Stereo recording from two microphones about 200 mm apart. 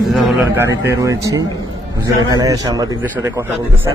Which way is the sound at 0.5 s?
15° right (ahead or behind).